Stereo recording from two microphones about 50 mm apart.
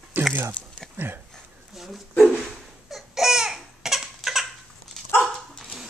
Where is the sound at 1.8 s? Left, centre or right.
Centre.